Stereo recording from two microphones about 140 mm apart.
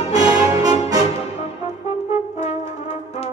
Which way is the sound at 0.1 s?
25° right (ahead or behind).